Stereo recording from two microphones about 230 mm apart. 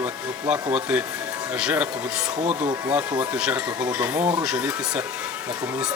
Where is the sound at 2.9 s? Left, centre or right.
Centre.